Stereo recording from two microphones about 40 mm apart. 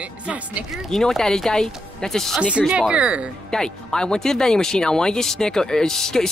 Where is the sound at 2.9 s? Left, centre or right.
Right.